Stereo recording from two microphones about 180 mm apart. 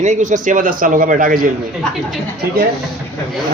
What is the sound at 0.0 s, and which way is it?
A man's voice, 40° right (ahead or behind).